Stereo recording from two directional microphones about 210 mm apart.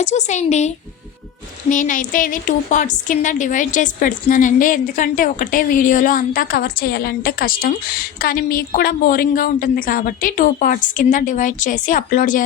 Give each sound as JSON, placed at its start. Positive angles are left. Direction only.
{"t": 0.0, "sound": "a woman's voice", "side_deg": 35}
{"t": 1.7, "sound": "a woman's voice", "side_deg": 40}